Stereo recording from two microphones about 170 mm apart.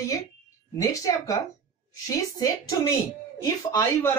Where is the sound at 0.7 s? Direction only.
20° left (ahead or behind).